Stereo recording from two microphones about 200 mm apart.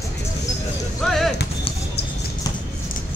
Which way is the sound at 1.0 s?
Centre (ahead or behind).